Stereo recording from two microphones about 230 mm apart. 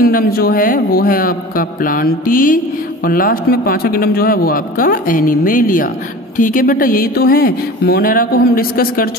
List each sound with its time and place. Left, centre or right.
0.0 s a woman's voice: left